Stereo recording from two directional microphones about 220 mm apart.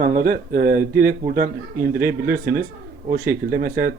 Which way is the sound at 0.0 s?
40° right (ahead or behind).